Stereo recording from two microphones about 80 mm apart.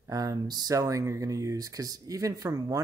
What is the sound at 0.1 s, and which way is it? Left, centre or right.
Speech, right.